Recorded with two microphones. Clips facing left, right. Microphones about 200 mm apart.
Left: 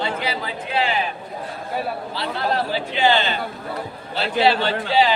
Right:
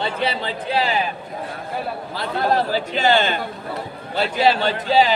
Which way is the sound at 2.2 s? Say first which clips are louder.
Right 4 dB; 45° right (ahead or behind).